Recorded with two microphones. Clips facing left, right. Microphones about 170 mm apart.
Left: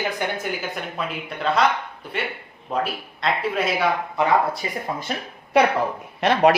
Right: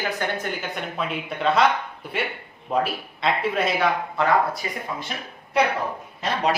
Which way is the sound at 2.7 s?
Centre (ahead or behind).